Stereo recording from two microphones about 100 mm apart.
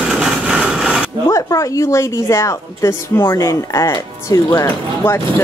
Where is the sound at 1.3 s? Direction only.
35° left (ahead or behind).